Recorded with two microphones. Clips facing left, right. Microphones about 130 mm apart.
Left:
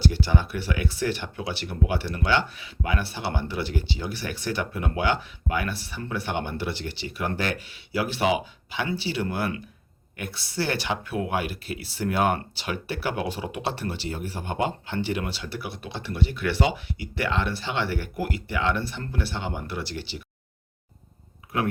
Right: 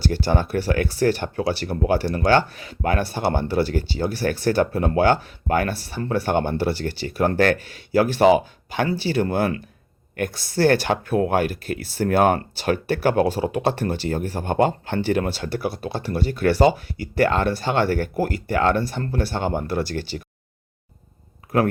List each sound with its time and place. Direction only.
0.0 s speech: 45° right (ahead or behind)
21.5 s speech: 45° right (ahead or behind)